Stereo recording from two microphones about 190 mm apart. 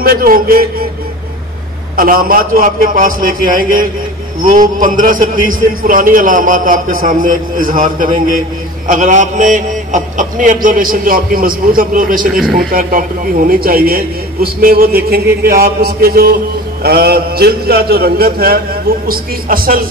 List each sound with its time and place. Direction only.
0.0 s a man's voice: 50° right (ahead or behind)
2.0 s a man's voice: 50° right (ahead or behind)